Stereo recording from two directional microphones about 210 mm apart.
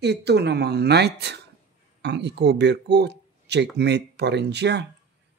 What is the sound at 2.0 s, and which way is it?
Speech, 55° right (ahead or behind).